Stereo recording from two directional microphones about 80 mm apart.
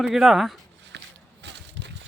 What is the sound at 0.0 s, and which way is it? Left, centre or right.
Speech, centre.